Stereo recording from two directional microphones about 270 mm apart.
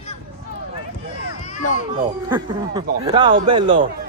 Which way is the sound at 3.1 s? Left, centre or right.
Centre.